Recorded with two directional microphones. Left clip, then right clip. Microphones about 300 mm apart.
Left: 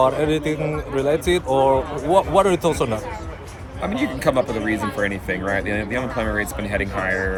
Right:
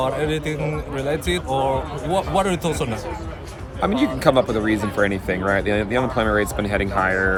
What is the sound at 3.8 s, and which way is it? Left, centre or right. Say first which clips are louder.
Speech: right 3 dB; centre.